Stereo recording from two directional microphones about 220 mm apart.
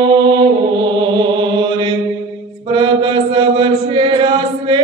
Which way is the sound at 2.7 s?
20° right (ahead or behind).